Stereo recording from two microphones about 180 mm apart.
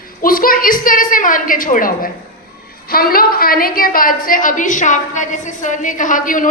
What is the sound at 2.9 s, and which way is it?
A woman's voice, 55° left (ahead or behind).